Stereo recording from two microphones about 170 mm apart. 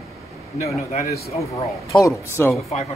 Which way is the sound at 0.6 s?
40° left (ahead or behind).